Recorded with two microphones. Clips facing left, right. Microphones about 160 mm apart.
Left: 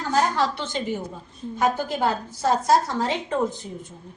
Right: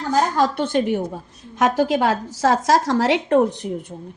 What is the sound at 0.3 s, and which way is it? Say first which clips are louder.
A woman's voice: right 6 dB; 50° right (ahead or behind).